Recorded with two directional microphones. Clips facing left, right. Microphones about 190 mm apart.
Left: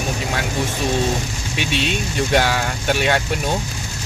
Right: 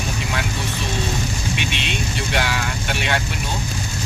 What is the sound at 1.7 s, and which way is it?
Speech, 40° left (ahead or behind).